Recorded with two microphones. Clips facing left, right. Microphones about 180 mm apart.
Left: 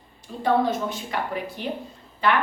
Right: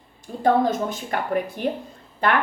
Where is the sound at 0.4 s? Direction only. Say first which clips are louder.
Right 3 dB; 45° right (ahead or behind).